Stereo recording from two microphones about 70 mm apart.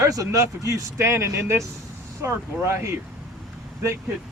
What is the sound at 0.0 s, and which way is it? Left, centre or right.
Speech, right.